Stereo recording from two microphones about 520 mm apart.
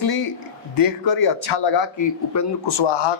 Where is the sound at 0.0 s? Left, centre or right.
Left.